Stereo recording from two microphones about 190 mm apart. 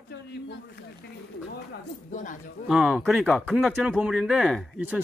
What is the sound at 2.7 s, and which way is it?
Speech, 5° right (ahead or behind).